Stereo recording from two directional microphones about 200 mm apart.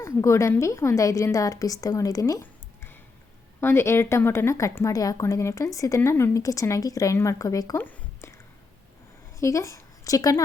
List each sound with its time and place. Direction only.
0.0 s a woman's voice: 15° left (ahead or behind)
9.4 s speech: 15° left (ahead or behind)